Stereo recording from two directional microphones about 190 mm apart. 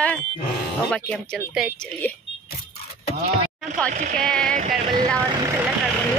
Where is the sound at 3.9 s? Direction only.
40° right (ahead or behind).